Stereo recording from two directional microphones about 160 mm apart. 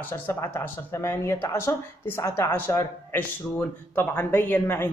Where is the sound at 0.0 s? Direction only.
15° left (ahead or behind).